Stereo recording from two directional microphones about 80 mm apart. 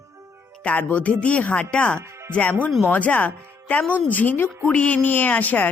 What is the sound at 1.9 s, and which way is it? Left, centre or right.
Music, right.